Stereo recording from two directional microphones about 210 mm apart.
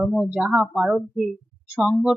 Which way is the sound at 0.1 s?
Centre (ahead or behind).